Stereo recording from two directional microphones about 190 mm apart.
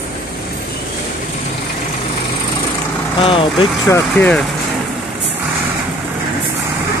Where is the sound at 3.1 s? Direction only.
30° left (ahead or behind).